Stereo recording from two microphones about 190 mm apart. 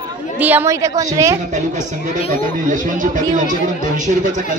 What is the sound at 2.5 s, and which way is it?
Speech, 45° right (ahead or behind).